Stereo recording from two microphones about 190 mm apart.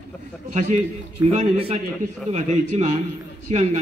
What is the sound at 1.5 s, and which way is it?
A man's voice, 30° right (ahead or behind).